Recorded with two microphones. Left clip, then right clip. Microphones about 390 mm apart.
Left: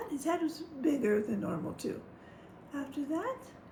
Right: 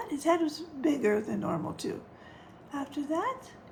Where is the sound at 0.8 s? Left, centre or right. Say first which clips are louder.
Right 3 dB; centre.